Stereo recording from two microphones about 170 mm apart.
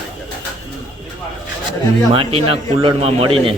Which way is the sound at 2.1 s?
35° right (ahead or behind).